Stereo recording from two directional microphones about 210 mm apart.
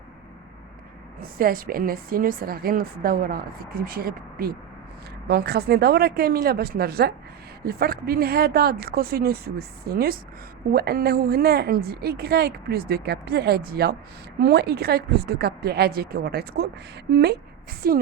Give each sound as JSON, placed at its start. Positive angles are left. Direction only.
{"t": 1.2, "sound": "a woman's voice", "side_deg": -45}